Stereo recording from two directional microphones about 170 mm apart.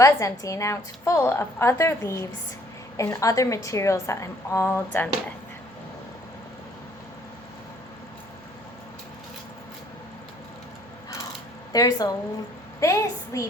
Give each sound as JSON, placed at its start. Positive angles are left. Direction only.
{"t": 0.0, "sound": "a woman's voice", "side_deg": 20}
{"t": 11.7, "sound": "a woman's voice", "side_deg": 20}